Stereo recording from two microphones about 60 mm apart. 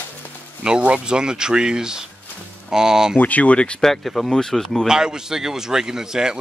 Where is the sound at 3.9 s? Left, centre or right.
Centre.